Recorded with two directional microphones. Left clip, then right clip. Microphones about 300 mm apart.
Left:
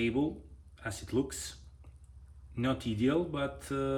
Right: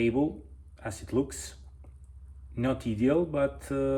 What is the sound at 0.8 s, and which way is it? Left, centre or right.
Speech, centre.